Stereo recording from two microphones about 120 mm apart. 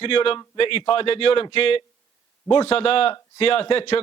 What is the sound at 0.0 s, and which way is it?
A man's voice, 50° left (ahead or behind).